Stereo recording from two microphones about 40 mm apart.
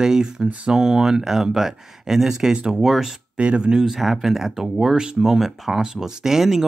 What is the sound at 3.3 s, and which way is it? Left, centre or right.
Speech, right.